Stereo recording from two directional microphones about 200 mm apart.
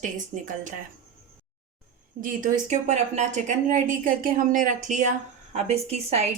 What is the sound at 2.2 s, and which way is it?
Speech, 40° right (ahead or behind).